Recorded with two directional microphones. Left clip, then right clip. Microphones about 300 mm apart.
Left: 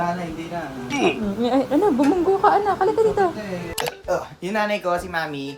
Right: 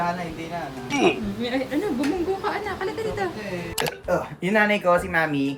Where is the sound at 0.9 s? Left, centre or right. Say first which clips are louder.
Even; centre.